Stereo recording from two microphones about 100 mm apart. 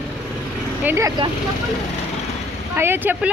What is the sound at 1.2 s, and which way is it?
Speech, 50° right (ahead or behind).